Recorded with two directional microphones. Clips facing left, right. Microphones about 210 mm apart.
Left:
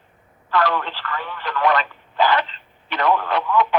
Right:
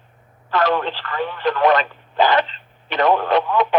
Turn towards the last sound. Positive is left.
turn(degrees=-20)  # may be behind; listen again after turning